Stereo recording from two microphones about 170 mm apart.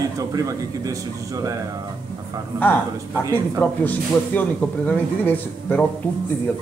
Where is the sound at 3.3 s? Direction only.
10° left (ahead or behind).